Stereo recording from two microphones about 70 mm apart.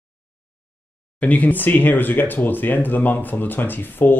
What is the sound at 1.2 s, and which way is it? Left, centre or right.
Speech, left.